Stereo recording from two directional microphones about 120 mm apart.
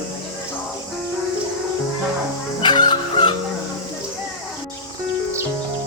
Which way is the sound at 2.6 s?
40° left (ahead or behind).